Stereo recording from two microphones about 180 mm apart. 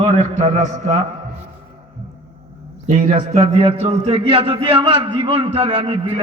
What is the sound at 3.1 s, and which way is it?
A man's voice, 35° right (ahead or behind).